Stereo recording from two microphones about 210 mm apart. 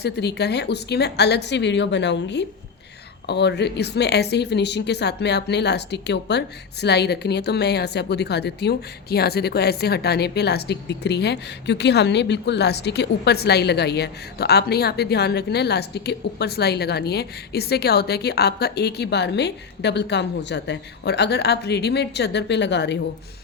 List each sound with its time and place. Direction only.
0.0 s a woman's voice: 50° left (ahead or behind)